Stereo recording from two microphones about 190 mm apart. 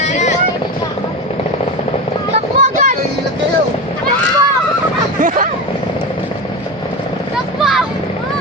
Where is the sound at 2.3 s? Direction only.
40° right (ahead or behind).